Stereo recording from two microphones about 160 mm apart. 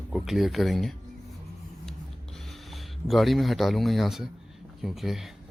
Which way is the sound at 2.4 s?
Centre (ahead or behind).